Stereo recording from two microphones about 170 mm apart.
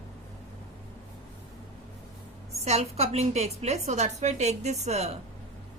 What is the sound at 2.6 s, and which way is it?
A woman's voice, 40° right (ahead or behind).